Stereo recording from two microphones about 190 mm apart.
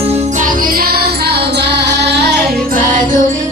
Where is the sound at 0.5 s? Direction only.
50° right (ahead or behind).